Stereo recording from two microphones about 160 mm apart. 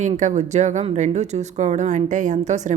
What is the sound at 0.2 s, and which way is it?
Speech, 50° right (ahead or behind).